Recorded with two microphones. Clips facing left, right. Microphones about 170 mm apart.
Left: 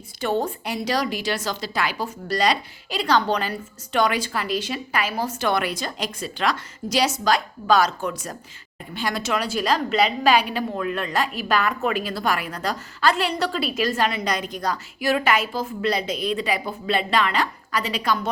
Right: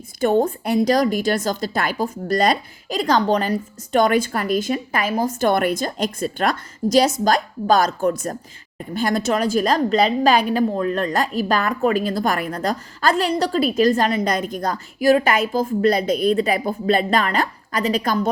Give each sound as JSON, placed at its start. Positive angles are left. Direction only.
{"t": 0.2, "sound": "a woman's voice", "side_deg": -45}